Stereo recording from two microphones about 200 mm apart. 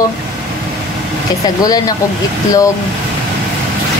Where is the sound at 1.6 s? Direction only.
20° left (ahead or behind).